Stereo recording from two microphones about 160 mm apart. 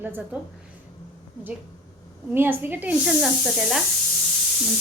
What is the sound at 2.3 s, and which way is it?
A woman's voice, 10° right (ahead or behind).